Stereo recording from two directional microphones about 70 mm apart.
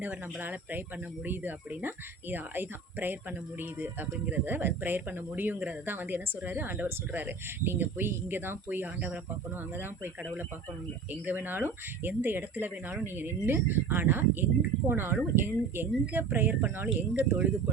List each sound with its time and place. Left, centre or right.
0.0 s speech: right